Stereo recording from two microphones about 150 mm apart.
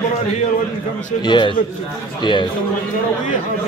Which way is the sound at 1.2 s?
30° left (ahead or behind).